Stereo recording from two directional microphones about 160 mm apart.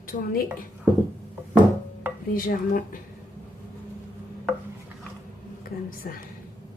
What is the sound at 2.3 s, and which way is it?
Speech, 60° left (ahead or behind).